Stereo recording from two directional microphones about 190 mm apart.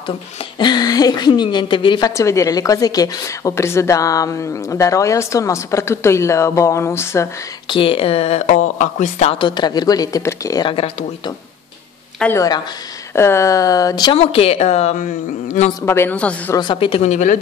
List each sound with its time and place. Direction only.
0.6 s a woman's voice: 20° left (ahead or behind)
7.6 s speech: 25° left (ahead or behind)
12.2 s a woman's voice: 10° left (ahead or behind); by 15.7 s 40° left (ahead or behind)
15.8 s a woman's voice: 15° left (ahead or behind)
16.5 s speech: 25° left (ahead or behind)